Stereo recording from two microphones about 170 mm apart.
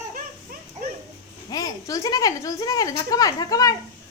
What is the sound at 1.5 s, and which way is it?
Speech, 20° left (ahead or behind).